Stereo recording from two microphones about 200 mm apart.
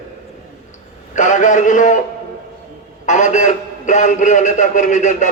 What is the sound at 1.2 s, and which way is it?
Speech, 35° left (ahead or behind).